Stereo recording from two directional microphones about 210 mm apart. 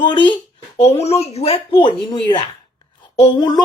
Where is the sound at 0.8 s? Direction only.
30° left (ahead or behind).